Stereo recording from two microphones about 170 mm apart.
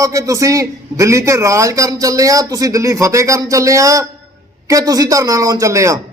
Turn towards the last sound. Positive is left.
turn(degrees=-20)  # may be behind; listen again after turning